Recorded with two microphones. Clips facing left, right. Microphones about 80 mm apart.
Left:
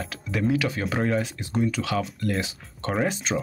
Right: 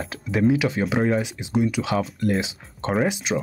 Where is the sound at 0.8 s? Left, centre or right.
Centre.